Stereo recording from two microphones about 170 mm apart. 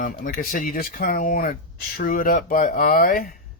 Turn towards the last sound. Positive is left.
turn(degrees=55)  # may be behind; listen again after turning